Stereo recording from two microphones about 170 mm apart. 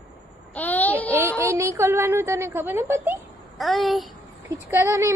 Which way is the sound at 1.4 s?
15° right (ahead or behind).